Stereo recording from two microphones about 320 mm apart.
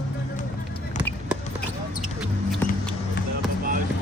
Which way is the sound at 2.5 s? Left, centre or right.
Centre.